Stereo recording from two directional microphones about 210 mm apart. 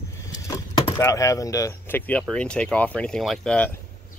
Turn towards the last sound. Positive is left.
turn(degrees=5)  # may be behind; listen again after turning